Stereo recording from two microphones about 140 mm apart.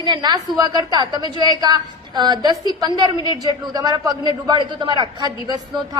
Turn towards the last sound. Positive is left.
turn(degrees=-30)  # may be behind; listen again after turning